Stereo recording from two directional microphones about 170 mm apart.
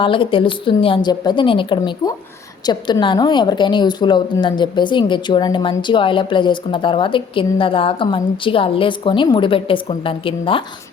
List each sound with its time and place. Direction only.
0.0 s a woman's voice: 30° left (ahead or behind)